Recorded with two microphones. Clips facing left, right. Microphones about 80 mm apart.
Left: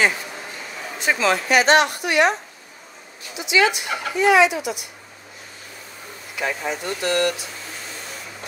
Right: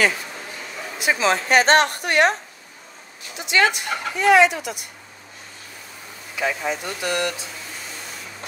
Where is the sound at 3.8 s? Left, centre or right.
Right.